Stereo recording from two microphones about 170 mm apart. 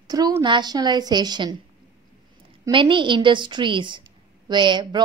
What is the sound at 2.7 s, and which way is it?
A woman's voice, 30° right (ahead or behind).